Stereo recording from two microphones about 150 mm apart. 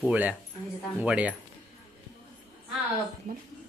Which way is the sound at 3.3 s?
70° right (ahead or behind).